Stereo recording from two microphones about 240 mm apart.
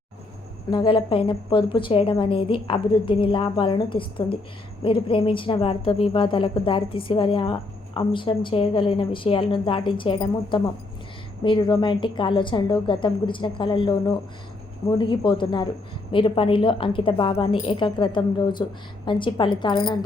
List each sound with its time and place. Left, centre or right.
0.7 s a woman's voice: left